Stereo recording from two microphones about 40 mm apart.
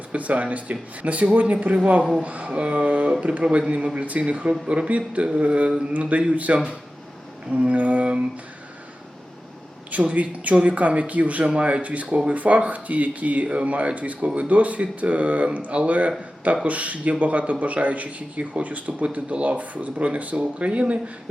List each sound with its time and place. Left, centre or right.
0.1 s speech: right
9.9 s a man's voice: right
20.3 s speech: right